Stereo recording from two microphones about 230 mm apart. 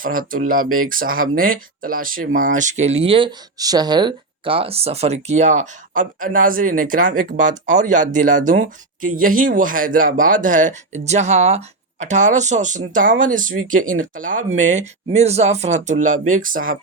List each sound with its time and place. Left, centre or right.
0.0 s speech: right